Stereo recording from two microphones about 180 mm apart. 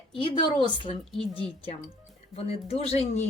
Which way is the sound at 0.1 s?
30° left (ahead or behind).